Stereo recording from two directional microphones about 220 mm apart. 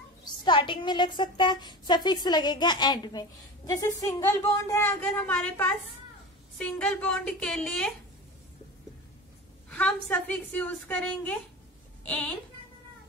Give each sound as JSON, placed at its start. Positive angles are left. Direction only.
{"t": 0.2, "sound": "a woman's voice", "side_deg": 20}
{"t": 9.7, "sound": "a woman's voice", "side_deg": 5}